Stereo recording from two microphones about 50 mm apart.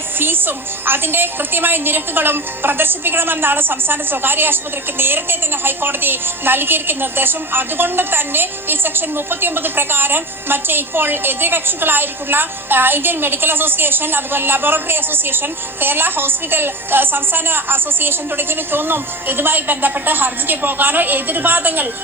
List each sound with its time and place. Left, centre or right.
0.2 s a woman's voice: right